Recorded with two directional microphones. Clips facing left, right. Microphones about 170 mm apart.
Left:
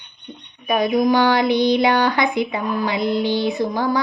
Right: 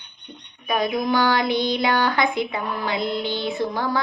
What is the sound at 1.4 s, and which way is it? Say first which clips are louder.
A woman's voice: left 6 dB; 15° left (ahead or behind).